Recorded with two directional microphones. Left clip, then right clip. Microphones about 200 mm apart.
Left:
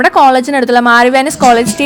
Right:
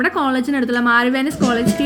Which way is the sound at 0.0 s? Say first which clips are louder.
Left 12 dB; 30° left (ahead or behind).